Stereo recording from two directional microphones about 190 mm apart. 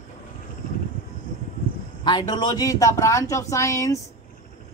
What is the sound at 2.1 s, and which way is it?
Speech, 20° left (ahead or behind).